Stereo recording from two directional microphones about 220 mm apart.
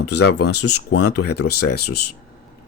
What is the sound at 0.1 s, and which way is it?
Speech, 50° left (ahead or behind).